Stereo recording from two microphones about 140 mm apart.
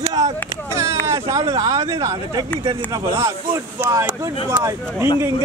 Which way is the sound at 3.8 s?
20° right (ahead or behind).